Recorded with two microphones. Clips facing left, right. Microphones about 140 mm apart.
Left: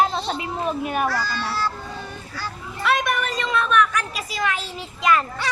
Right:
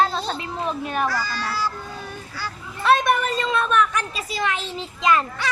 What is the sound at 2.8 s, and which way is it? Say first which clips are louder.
A woman's voice: right 4 dB; 30° right (ahead or behind).